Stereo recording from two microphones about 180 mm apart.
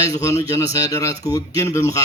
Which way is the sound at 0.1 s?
15° left (ahead or behind).